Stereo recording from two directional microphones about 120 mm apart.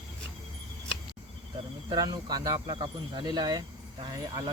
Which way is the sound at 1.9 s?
35° right (ahead or behind).